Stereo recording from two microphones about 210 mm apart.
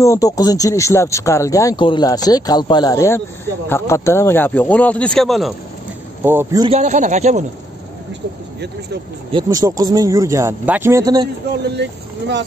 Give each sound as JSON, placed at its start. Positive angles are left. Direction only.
{"t": 0.0, "sound": "speech", "side_deg": 15}
{"t": 6.2, "sound": "speech", "side_deg": -10}
{"t": 6.6, "sound": "speech", "side_deg": -30}
{"t": 9.3, "sound": "speech", "side_deg": -20}
{"t": 11.7, "sound": "speech", "side_deg": -55}